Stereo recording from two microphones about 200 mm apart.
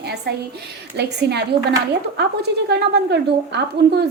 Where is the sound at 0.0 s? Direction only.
55° right (ahead or behind).